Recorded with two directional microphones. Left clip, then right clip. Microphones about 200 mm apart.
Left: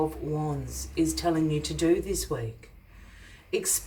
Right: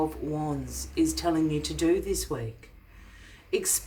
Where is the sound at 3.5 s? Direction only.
30° right (ahead or behind).